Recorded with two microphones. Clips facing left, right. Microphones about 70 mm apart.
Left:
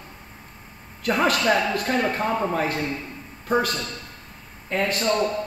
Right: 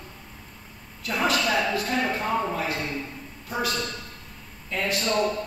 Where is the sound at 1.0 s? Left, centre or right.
Left.